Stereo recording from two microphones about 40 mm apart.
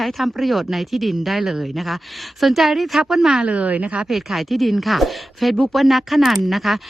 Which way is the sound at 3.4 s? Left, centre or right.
Right.